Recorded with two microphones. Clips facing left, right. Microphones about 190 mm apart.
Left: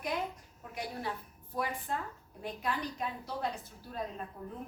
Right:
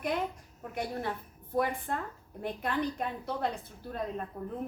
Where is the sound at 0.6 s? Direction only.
55° right (ahead or behind).